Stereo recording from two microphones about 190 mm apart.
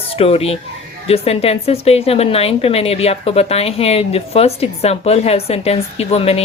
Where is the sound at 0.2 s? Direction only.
30° left (ahead or behind).